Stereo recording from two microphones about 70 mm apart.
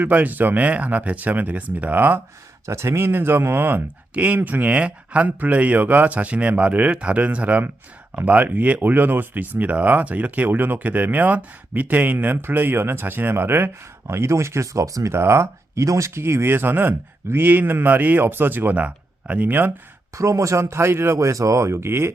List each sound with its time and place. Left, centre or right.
0.0 s speech: right
4.1 s speech: right
14.1 s speech: right
20.1 s speech: right